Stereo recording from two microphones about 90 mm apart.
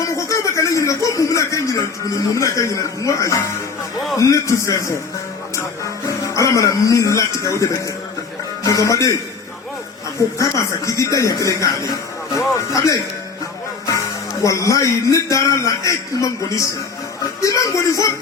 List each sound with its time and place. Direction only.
0.2 s a man's voice: 35° left (ahead or behind)
10.3 s a man's voice: 35° left (ahead or behind)
14.4 s a man's voice: 35° left (ahead or behind)